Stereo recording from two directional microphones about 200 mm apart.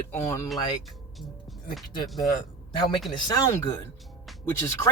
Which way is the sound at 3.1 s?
20° left (ahead or behind).